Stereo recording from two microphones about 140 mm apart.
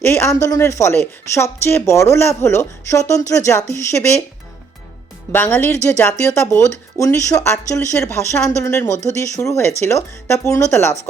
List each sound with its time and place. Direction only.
0.0 s a woman's voice: 20° left (ahead or behind)
5.3 s a woman's voice: 15° left (ahead or behind)